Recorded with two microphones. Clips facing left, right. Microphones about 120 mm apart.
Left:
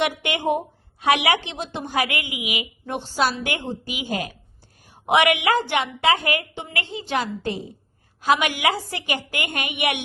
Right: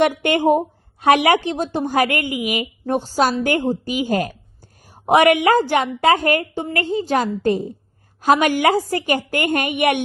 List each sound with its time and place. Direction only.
0.2 s a woman's voice: 45° right (ahead or behind)